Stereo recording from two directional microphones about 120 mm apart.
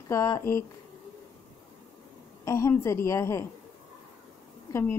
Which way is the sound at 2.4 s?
25° left (ahead or behind).